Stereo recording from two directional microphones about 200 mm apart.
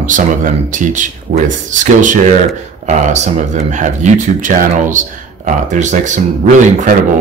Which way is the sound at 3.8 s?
40° right (ahead or behind).